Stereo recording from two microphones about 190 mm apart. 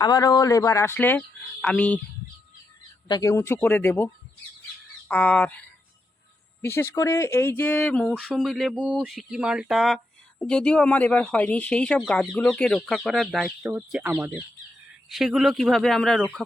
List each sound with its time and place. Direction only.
0.0 s speech: 20° left (ahead or behind)
3.1 s speech: 15° left (ahead or behind); by 16.4 s centre (ahead or behind)